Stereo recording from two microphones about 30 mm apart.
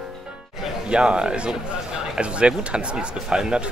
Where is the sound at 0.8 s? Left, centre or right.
Right.